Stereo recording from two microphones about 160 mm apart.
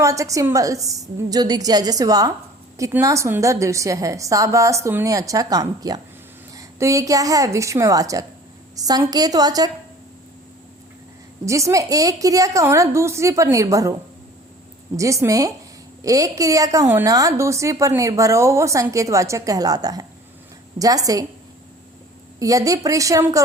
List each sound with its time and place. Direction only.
0.0 s a woman's voice: 20° right (ahead or behind)
11.4 s a woman's voice: 20° right (ahead or behind)
14.9 s a woman's voice: 20° right (ahead or behind)
22.4 s a woman's voice: 20° right (ahead or behind)